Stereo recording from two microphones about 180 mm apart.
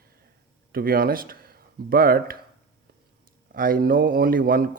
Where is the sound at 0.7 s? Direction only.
55° right (ahead or behind).